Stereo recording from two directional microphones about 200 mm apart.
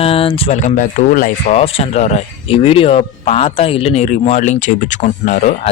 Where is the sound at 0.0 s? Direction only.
30° left (ahead or behind); by 1.5 s 45° left (ahead or behind).